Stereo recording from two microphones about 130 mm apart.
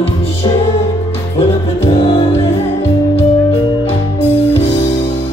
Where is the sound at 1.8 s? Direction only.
50° left (ahead or behind).